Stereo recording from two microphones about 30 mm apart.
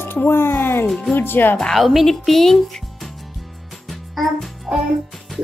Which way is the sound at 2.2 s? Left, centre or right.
Centre.